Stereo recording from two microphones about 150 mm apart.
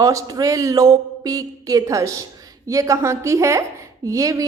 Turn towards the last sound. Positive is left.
turn(degrees=-20)  # may be behind; listen again after turning